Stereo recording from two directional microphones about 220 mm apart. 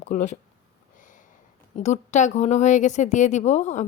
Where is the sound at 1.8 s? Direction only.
30° left (ahead or behind).